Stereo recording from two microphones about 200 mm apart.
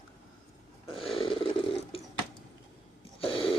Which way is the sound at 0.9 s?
25° left (ahead or behind).